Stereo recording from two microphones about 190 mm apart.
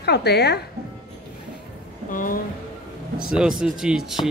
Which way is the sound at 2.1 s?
45° left (ahead or behind).